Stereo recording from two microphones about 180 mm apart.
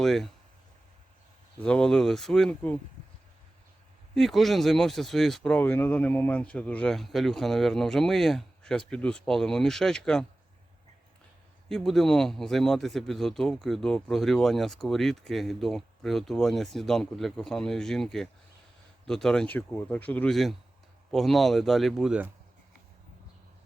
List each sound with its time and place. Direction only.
0.0 s speech: centre (ahead or behind)
1.6 s speech: 5° left (ahead or behind)
4.1 s speech: centre (ahead or behind)
11.7 s speech: centre (ahead or behind)